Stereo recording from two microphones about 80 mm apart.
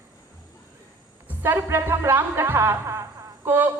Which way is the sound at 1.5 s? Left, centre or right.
Right.